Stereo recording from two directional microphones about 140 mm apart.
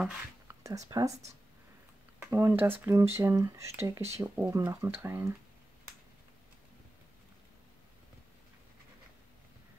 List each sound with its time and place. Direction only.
0.7 s speech: 25° right (ahead or behind)
2.3 s speech: 20° right (ahead or behind)